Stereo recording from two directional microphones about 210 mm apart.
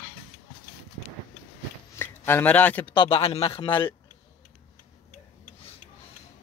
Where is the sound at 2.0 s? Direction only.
10° left (ahead or behind).